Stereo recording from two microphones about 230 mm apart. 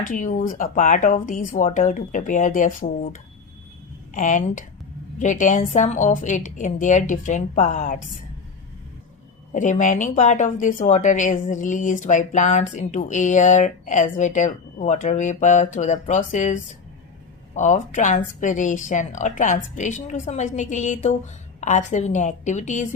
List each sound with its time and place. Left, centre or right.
0.0 s speech: left
9.5 s speech: left